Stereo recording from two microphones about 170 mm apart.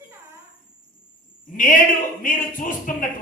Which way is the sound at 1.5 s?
50° left (ahead or behind).